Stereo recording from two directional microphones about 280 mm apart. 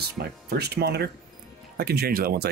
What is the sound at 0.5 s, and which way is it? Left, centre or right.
Speech, right.